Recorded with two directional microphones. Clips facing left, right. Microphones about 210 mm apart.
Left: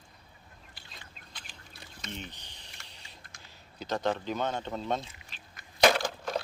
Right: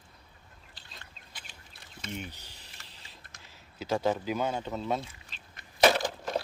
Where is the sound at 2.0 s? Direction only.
10° right (ahead or behind).